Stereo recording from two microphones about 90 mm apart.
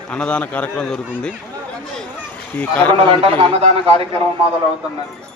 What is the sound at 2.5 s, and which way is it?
Speech, 20° left (ahead or behind).